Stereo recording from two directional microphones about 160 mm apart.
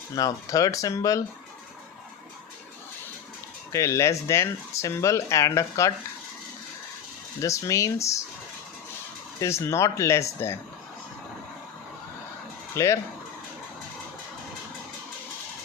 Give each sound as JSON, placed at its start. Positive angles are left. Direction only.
{"t": 0.2, "sound": "speech", "side_deg": 20}
{"t": 3.7, "sound": "speech", "side_deg": 20}
{"t": 7.4, "sound": "speech", "side_deg": 20}
{"t": 9.4, "sound": "speech", "side_deg": 20}
{"t": 12.7, "sound": "speech", "side_deg": 15}